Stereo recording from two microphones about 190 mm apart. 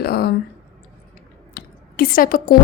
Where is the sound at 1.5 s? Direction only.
50° left (ahead or behind).